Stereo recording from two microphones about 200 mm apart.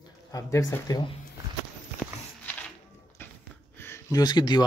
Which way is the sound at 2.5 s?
10° left (ahead or behind).